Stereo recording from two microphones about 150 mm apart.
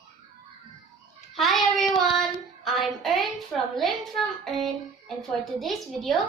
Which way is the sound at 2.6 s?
Centre (ahead or behind).